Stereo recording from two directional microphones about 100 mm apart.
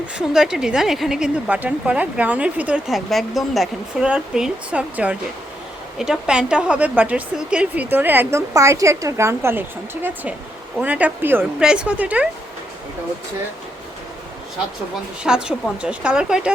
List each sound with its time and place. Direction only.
0.2 s a woman's voice: 5° right (ahead or behind)
1.5 s speech: 15° right (ahead or behind)
2.9 s a woman's voice: centre (ahead or behind); by 11.4 s 20° right (ahead or behind)
11.6 s speech: 10° right (ahead or behind)
15.2 s speech: 10° right (ahead or behind)